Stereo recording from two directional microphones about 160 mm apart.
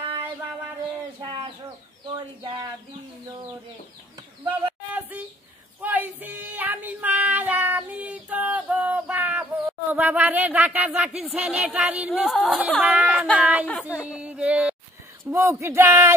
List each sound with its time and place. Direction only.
1.2 s speech: 30° right (ahead or behind)
4.5 s a sound: 10° right (ahead or behind)
5.8 s music: 10° right (ahead or behind)
13.4 s speech: 10° right (ahead or behind)